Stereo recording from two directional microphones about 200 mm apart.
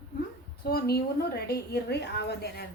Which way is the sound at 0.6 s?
50° left (ahead or behind).